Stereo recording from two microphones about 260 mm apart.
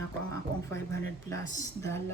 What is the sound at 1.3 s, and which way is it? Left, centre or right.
Speech, centre.